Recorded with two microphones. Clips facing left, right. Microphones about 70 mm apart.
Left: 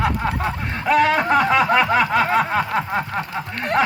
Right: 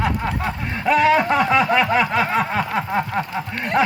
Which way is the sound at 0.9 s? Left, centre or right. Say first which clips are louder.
Right 1 dB; centre.